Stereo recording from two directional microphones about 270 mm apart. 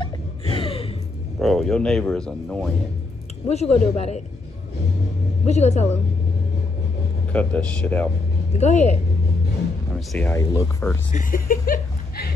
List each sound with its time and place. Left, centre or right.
0.0 s a sound: centre
1.4 s speech: centre
3.4 s a woman's voice: left
5.4 s a woman's voice: left
7.3 s speech: centre
8.5 s a woman's voice: left
9.9 s speech: centre
11.1 s chuckle: left